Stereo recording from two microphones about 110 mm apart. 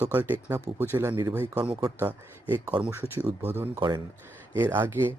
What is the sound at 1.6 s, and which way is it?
Speech, 40° right (ahead or behind).